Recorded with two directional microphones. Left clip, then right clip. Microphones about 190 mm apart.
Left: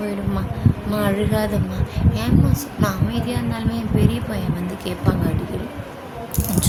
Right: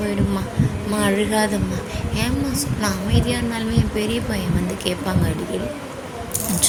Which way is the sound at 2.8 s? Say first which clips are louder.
Even; 20° left (ahead or behind).